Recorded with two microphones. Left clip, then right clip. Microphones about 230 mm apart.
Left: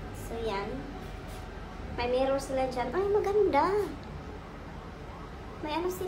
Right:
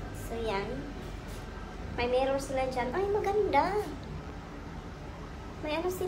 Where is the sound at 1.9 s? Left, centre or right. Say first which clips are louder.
Even; centre.